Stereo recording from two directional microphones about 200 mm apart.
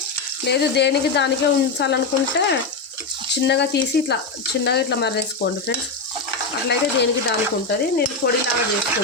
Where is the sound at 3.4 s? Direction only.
60° left (ahead or behind).